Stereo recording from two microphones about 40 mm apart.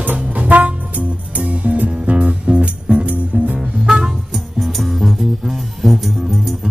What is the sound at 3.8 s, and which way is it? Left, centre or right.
Music, centre.